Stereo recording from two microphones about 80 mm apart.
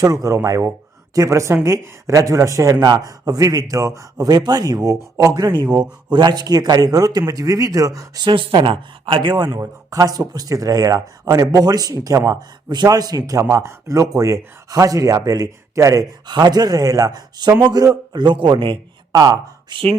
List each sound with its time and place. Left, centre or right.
0.0 s a woman's voice: right
8.2 s speech: right
9.5 s speech: right
12.7 s speech: right
16.2 s speech: right
19.1 s speech: right
19.7 s speech: right